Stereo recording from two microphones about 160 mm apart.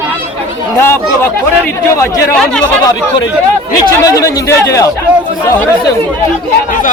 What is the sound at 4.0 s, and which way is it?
Speech, 20° left (ahead or behind).